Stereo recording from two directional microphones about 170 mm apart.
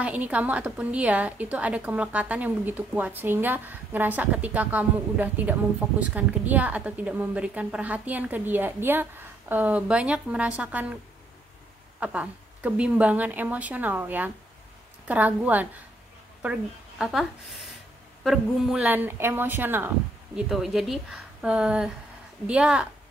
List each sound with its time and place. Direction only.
0.0 s a woman's voice: 10° right (ahead or behind)
12.0 s a woman's voice: 5° right (ahead or behind)
17.0 s a woman's voice: centre (ahead or behind)